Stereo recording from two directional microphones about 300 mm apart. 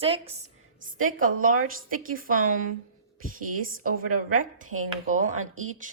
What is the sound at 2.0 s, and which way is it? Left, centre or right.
Speech, right.